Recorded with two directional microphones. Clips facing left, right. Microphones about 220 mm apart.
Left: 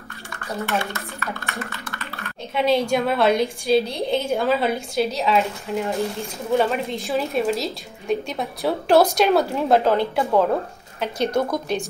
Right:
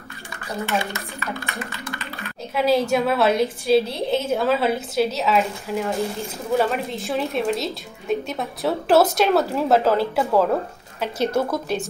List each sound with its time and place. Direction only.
0.3 s speech: 15° right (ahead or behind)
1.6 s music: 15° right (ahead or behind)
2.5 s a woman's voice: 5° right (ahead or behind)